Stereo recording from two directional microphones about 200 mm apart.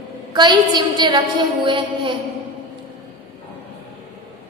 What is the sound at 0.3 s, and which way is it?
A woman's voice, 20° right (ahead or behind).